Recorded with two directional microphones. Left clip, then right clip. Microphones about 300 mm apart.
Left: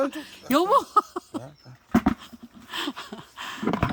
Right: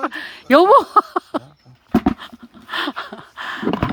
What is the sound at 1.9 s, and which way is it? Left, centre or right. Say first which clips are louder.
Dog: right 5 dB; right.